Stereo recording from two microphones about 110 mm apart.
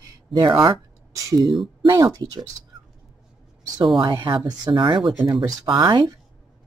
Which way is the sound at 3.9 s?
40° right (ahead or behind).